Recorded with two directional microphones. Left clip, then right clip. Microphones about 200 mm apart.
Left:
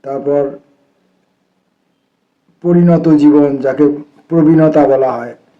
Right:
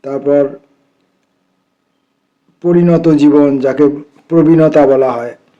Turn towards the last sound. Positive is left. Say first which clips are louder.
# right 1 dB
turn(degrees=-40)  # may be behind; listen again after turning